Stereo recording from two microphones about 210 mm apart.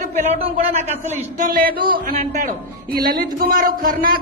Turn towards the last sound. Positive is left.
turn(degrees=-40)  # may be behind; listen again after turning